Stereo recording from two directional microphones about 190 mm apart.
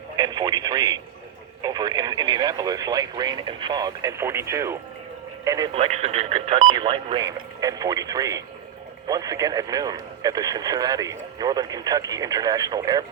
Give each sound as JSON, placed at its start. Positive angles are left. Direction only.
{"t": 0.2, "sound": "speech", "side_deg": -20}
{"t": 5.7, "sound": "speech", "side_deg": -30}